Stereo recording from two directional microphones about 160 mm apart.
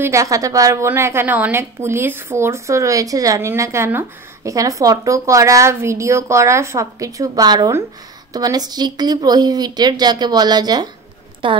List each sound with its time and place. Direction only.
0.0 s a woman's voice: 20° right (ahead or behind)